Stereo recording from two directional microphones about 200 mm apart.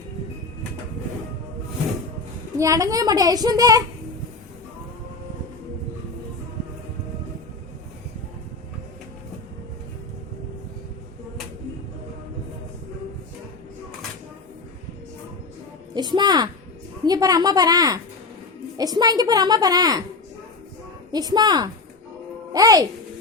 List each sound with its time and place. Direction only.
2.6 s a woman's voice: 15° right (ahead or behind)
16.0 s music: 20° right (ahead or behind)
17.1 s a woman's voice: 20° right (ahead or behind)
21.1 s a woman's voice: 20° right (ahead or behind)